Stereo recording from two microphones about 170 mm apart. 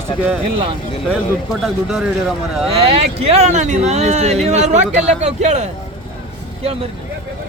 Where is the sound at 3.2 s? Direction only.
40° right (ahead or behind).